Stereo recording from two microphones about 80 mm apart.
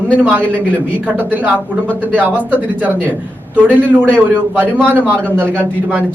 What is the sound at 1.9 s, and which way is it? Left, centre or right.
Speech, centre.